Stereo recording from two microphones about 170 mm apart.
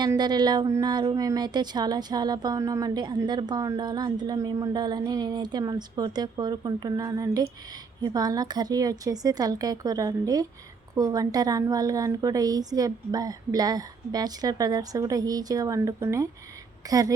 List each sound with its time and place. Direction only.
0.0 s a woman's voice: 25° right (ahead or behind)